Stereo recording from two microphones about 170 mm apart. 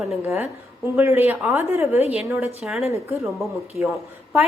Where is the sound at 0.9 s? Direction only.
15° right (ahead or behind).